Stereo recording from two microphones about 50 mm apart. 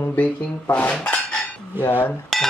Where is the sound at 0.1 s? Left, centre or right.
Left.